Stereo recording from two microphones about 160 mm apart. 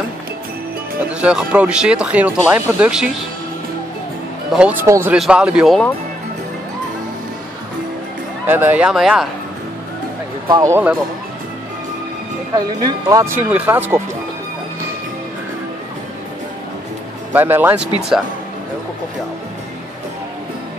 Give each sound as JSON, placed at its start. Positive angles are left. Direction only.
{"t": 1.0, "sound": "speech", "side_deg": -5}
{"t": 4.5, "sound": "speech", "side_deg": -5}
{"t": 4.8, "sound": "speech", "side_deg": -20}
{"t": 5.1, "sound": "speech", "side_deg": -5}
{"t": 8.5, "sound": "speech", "side_deg": -10}
{"t": 10.5, "sound": "speech", "side_deg": -20}
{"t": 12.8, "sound": "speech", "side_deg": -20}
{"t": 17.3, "sound": "speech", "side_deg": -10}